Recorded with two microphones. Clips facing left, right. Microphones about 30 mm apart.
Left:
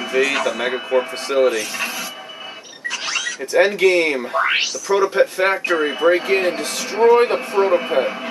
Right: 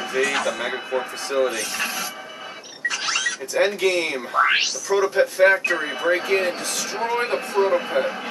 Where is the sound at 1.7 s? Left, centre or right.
Centre.